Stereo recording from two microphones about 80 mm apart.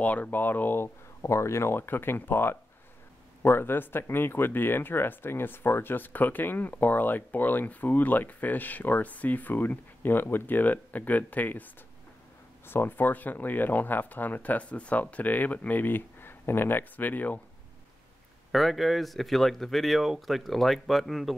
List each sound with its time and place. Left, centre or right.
0.0 s speech: centre
18.5 s speech: centre